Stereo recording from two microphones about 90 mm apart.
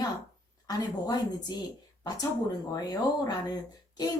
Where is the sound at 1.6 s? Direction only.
45° left (ahead or behind).